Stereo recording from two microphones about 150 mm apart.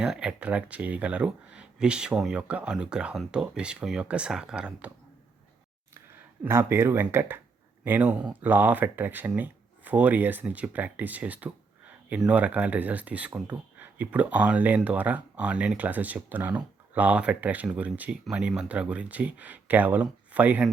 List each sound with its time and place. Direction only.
0.0 s speech: 5° right (ahead or behind)
6.4 s speech: 15° right (ahead or behind)